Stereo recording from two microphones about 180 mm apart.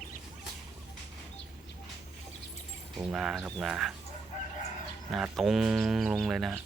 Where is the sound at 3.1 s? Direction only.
Centre (ahead or behind).